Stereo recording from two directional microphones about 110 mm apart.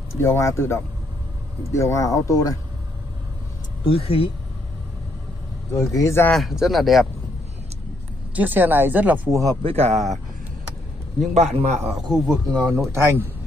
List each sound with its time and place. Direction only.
0.2 s speech: 25° left (ahead or behind)
3.8 s speech: 60° left (ahead or behind)
5.8 s speech: 25° left (ahead or behind)
6.3 s speech: centre (ahead or behind)
8.4 s a woman's voice: 15° right (ahead or behind)
9.3 s speech: 30° right (ahead or behind)
9.6 s speech: 70° right (ahead or behind)
11.3 s a man's voice: 90° right
12.4 s speech: 35° right (ahead or behind)
12.9 s a man's voice: 25° right (ahead or behind)